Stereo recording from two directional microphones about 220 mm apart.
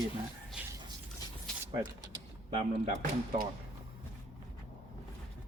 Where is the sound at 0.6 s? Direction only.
5° right (ahead or behind).